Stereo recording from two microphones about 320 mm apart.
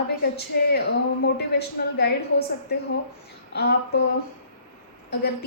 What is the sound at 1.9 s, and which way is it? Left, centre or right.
Speech, left.